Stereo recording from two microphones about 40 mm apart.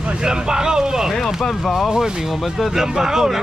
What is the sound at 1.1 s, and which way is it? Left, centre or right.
Speech, centre.